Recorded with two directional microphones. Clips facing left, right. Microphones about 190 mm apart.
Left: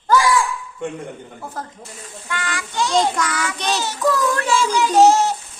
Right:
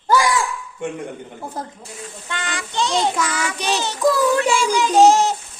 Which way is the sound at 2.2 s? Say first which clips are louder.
Left 2 dB; 25° right (ahead or behind).